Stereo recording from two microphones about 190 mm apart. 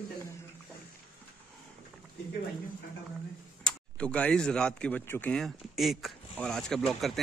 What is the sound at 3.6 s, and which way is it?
Speech, 5° left (ahead or behind).